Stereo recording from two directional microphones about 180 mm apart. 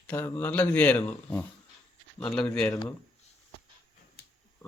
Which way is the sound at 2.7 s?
20° left (ahead or behind).